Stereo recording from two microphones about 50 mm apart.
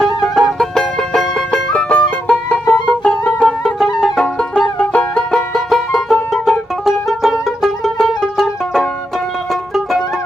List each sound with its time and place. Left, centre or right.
0.0 s music: centre; by 2.0 s left
2.0 s music: left
3.0 s music: left
3.6 s music: centre; by 5.2 s left
5.3 s music: centre
7.9 s music: centre